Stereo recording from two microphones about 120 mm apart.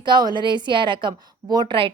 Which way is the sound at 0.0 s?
40° right (ahead or behind).